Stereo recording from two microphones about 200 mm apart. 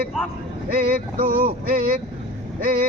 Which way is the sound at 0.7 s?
45° right (ahead or behind).